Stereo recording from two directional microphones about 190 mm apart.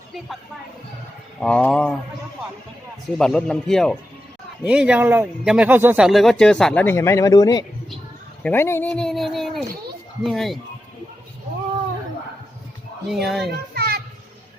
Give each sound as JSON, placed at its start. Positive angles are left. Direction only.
{"t": 1.4, "sound": "speech", "side_deg": 5}
{"t": 3.2, "sound": "speech", "side_deg": 5}
{"t": 13.1, "sound": "speech", "side_deg": 0}
{"t": 13.7, "sound": "a sound", "side_deg": -55}